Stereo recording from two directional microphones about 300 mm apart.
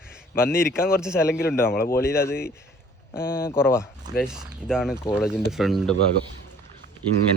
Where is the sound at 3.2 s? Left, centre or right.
Left.